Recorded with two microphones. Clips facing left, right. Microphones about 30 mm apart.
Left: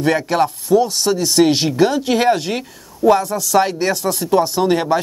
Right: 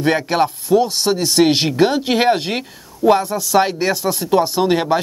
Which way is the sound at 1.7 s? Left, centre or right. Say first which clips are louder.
Even; right.